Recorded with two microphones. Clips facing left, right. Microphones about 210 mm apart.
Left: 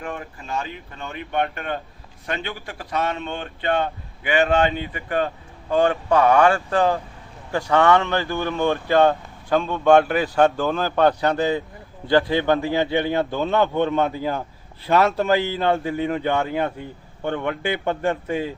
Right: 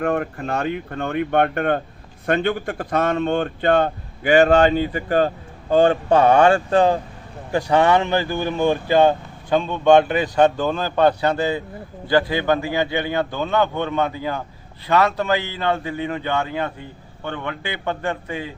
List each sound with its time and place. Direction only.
0.0 s speech: 60° right (ahead or behind); by 8.4 s 15° right (ahead or behind)
8.9 s speech: centre (ahead or behind)
10.0 s speech: 20° right (ahead or behind)
12.0 s a man's voice: 5° right (ahead or behind)